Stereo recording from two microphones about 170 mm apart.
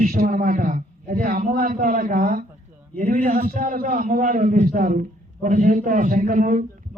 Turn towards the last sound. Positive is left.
turn(degrees=-50)  # may be behind; listen again after turning